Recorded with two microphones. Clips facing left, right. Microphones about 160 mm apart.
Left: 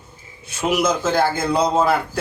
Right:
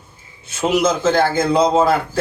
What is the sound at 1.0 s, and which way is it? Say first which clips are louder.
Speech: right 3 dB; 10° left (ahead or behind).